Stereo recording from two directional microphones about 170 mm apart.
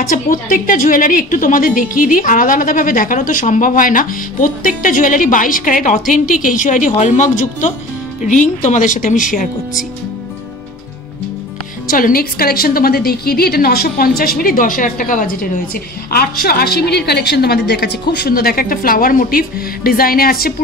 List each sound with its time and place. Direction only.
0.1 s a woman's voice: 55° left (ahead or behind)
11.9 s a woman's voice: 60° left (ahead or behind)